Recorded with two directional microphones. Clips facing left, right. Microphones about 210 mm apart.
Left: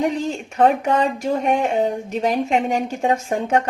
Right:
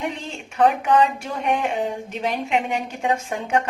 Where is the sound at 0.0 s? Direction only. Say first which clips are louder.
Left 8 dB; 45° left (ahead or behind).